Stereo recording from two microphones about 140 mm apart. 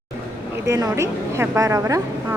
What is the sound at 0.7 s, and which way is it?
Speech, 20° right (ahead or behind).